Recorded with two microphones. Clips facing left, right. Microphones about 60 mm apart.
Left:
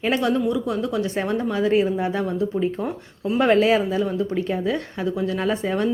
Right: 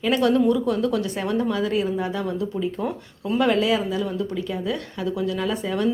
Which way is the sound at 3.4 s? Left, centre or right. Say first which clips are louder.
Left 3 dB; left.